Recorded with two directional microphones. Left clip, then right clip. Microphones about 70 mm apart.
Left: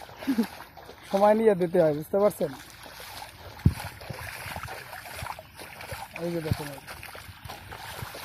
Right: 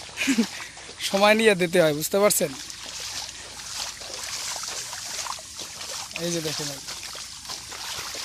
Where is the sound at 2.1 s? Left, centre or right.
Right.